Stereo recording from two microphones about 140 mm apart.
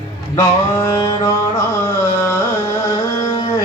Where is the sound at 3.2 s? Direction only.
30° left (ahead or behind).